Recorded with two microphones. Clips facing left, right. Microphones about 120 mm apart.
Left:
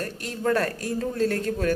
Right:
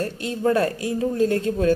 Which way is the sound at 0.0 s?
20° right (ahead or behind).